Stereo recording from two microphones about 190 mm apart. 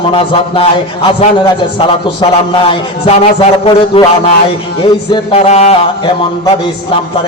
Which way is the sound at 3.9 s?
30° left (ahead or behind).